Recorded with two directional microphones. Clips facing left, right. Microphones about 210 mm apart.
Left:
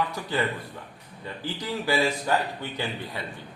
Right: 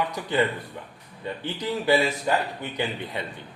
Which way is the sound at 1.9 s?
20° right (ahead or behind).